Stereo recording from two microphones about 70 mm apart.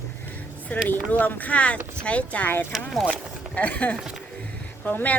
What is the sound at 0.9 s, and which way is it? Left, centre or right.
Speech, left.